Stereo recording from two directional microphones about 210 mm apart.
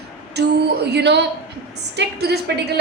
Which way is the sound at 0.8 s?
55° right (ahead or behind).